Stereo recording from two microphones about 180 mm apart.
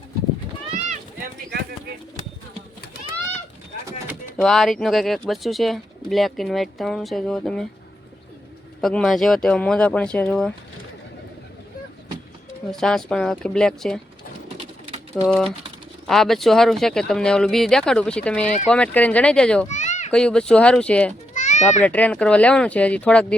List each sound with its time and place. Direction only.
4.4 s speech: centre (ahead or behind)
8.8 s speech: centre (ahead or behind)
12.7 s speech: 5° left (ahead or behind)
14.6 s bird: 40° right (ahead or behind)
15.1 s speech: 5° left (ahead or behind)
19.6 s children playing: 40° left (ahead or behind)
20.1 s speech: 5° left (ahead or behind)
21.3 s children playing: 40° left (ahead or behind)
21.8 s speech: 10° left (ahead or behind)